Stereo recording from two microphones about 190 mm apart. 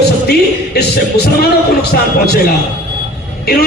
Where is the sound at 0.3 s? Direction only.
55° left (ahead or behind).